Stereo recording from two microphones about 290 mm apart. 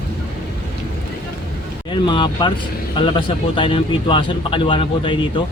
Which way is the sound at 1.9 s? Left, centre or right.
Centre.